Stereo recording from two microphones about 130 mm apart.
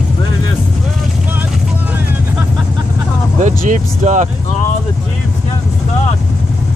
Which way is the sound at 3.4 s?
65° right (ahead or behind).